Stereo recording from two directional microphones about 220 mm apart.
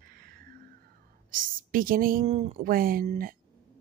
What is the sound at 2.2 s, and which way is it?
Speech, 30° right (ahead or behind).